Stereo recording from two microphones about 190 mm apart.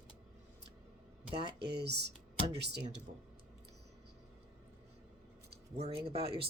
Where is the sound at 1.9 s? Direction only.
60° right (ahead or behind).